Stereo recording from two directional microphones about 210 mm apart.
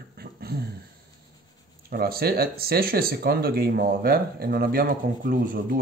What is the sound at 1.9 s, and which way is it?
Speech, 45° right (ahead or behind).